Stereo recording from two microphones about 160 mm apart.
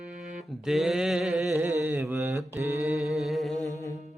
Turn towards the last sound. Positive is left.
turn(degrees=20)  # may be behind; listen again after turning